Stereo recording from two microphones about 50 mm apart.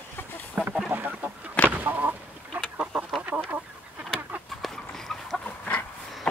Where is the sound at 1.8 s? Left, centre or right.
Right.